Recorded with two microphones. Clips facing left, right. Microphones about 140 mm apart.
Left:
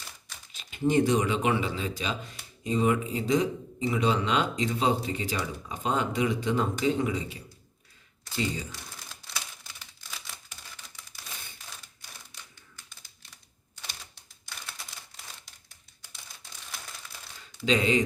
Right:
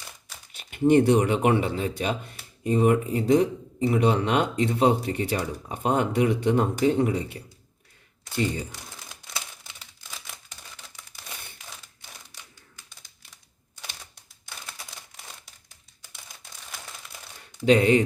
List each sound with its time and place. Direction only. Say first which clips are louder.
0.5 s speech: right 6 dB; 60° right (ahead or behind)
17.7 s speech: right 6 dB; 60° right (ahead or behind)